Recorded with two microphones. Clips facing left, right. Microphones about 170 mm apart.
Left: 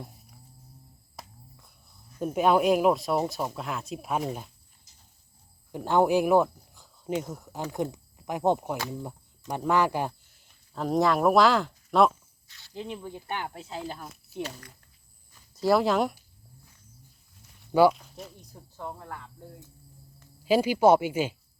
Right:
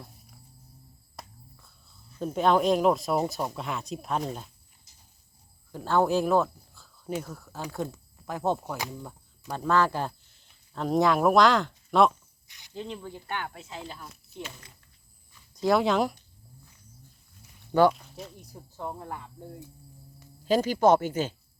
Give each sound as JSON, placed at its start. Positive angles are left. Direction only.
{"t": 1.6, "sound": "speech", "side_deg": 15}
{"t": 5.7, "sound": "speech", "side_deg": 15}
{"t": 12.5, "sound": "snake", "side_deg": -15}
{"t": 12.7, "sound": "speech", "side_deg": 10}
{"t": 13.6, "sound": "speech", "side_deg": 35}
{"t": 13.9, "sound": "speech", "side_deg": 55}
{"t": 15.5, "sound": "speech", "side_deg": 0}
{"t": 17.7, "sound": "speech", "side_deg": 10}
{"t": 18.8, "sound": "speech", "side_deg": -20}
{"t": 20.4, "sound": "speech", "side_deg": 10}